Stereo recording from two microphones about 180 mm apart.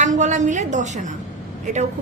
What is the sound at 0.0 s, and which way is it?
A woman's voice, 45° right (ahead or behind).